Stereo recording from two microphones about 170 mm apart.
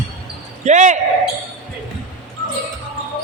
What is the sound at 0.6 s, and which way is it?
Speech, 45° right (ahead or behind).